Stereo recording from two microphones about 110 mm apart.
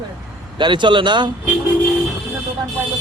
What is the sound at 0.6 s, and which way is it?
Speech, 45° right (ahead or behind).